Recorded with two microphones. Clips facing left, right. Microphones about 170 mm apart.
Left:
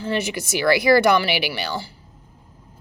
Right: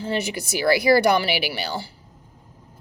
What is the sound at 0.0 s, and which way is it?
Speech, 35° right (ahead or behind).